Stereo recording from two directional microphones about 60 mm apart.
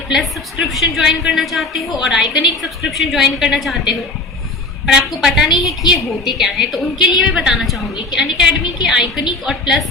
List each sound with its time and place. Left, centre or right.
0.1 s a woman's voice: centre